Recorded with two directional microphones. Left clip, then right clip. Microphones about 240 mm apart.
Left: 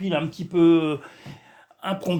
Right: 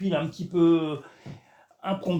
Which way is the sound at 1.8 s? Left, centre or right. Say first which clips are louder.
Left 2 dB; left.